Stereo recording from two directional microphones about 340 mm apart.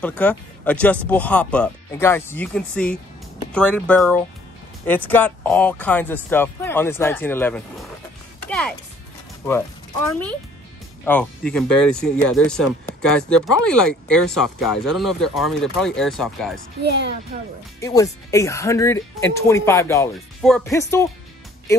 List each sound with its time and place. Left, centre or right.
0.2 s speech: centre
11.1 s speech: centre
16.8 s a child's voice: right
17.7 s speech: centre